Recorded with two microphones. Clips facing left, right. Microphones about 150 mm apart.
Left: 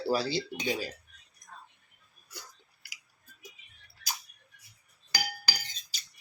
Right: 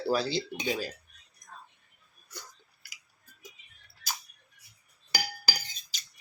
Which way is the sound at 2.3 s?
10° left (ahead or behind).